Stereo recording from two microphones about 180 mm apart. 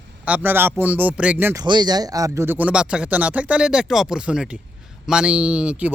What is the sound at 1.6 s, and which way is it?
Speech, 20° right (ahead or behind).